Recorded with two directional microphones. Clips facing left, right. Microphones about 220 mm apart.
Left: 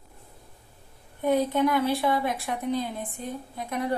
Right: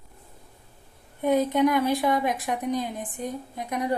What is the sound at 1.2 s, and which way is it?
A woman's voice, 15° right (ahead or behind).